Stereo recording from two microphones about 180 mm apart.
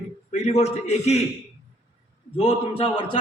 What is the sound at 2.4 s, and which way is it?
Speech, 30° left (ahead or behind).